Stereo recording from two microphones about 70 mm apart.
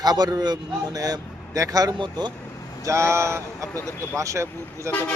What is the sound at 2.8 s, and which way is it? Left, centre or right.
Speech, right.